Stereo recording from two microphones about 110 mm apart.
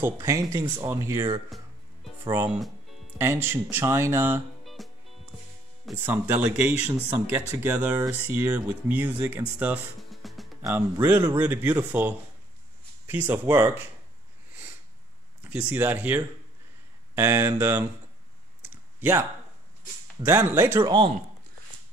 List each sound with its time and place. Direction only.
0.0 s speech: 30° right (ahead or behind)
3.2 s speech: 20° right (ahead or behind)
4.8 s music: centre (ahead or behind)
6.0 s speech: 15° right (ahead or behind)
10.2 s music: centre (ahead or behind)
10.7 s speech: 20° right (ahead or behind)
15.4 s speech: 15° right (ahead or behind)
18.6 s clicking: 20° right (ahead or behind)
20.2 s speech: 20° right (ahead or behind)
20.8 s speech: 50° right (ahead or behind)